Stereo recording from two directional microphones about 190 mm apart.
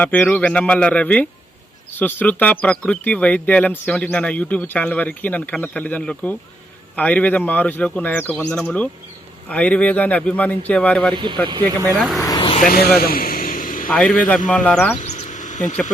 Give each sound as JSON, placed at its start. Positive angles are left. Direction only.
{"t": 0.0, "sound": "speech", "side_deg": 10}
{"t": 11.1, "sound": "speech", "side_deg": -25}
{"t": 11.9, "sound": "speech", "side_deg": 0}
{"t": 12.2, "sound": "vehicle", "side_deg": 20}
{"t": 12.5, "sound": "speech", "side_deg": 50}
{"t": 13.0, "sound": "a sound", "side_deg": 50}
{"t": 13.9, "sound": "speech", "side_deg": 5}
{"t": 15.0, "sound": "a sound", "side_deg": 35}